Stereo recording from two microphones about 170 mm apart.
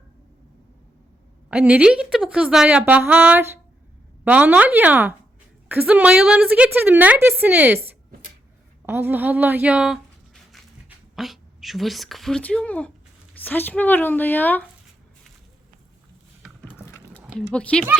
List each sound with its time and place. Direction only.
1.5 s a woman's voice: 5° right (ahead or behind)
8.9 s a woman's voice: 10° right (ahead or behind); by 14.6 s 10° left (ahead or behind)
16.8 s a sound: 15° left (ahead or behind)
17.3 s speech: 5° left (ahead or behind)